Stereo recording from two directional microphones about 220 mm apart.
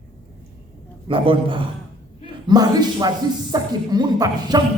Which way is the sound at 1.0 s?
25° right (ahead or behind).